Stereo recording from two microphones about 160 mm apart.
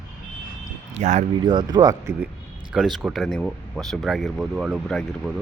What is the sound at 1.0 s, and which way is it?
Speech, 50° right (ahead or behind).